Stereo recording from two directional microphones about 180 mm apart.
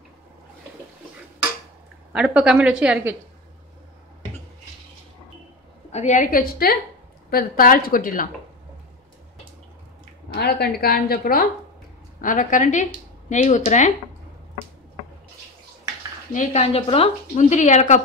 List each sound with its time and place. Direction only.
2.1 s a woman's voice: 5° right (ahead or behind)
5.9 s a woman's voice: 40° left (ahead or behind)
10.3 s a woman's voice: 60° left (ahead or behind)
12.2 s a woman's voice: 45° left (ahead or behind)
16.3 s a woman's voice: 35° left (ahead or behind)